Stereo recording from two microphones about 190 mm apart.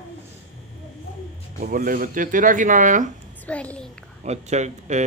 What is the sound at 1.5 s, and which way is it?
Speech, 45° right (ahead or behind).